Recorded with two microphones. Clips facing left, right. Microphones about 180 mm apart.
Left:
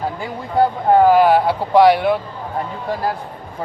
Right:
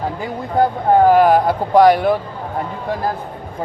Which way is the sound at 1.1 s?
45° right (ahead or behind).